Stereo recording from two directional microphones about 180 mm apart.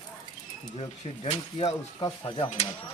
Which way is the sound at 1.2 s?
35° left (ahead or behind).